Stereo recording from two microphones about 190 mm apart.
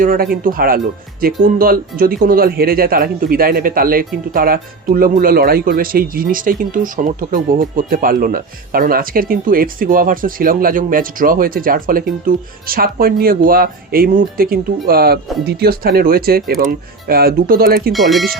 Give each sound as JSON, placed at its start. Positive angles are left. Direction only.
{"t": 0.0, "sound": "speech", "side_deg": -50}
{"t": 17.9, "sound": "speech", "side_deg": 0}